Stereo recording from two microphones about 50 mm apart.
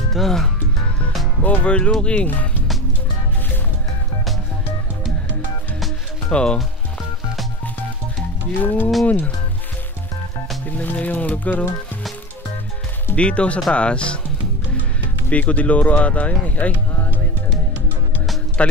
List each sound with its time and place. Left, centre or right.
0.1 s speech: centre
1.4 s speech: left
1.9 s speech: centre
6.3 s speech: centre
8.6 s speech: left
10.8 s speech: left
13.1 s speech: left
15.2 s speech: left
18.6 s speech: left